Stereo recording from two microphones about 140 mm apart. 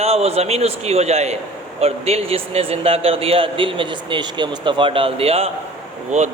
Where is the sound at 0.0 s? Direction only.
45° right (ahead or behind).